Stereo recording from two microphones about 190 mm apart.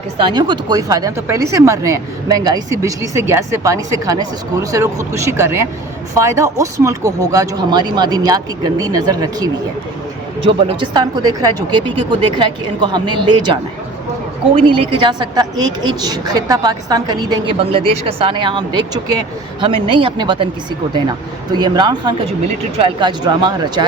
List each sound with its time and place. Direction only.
0.2 s a woman's voice: 25° right (ahead or behind)
15.0 s a woman's voice: 20° right (ahead or behind)